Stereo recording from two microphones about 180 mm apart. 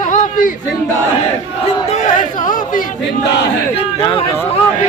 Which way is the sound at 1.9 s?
45° left (ahead or behind).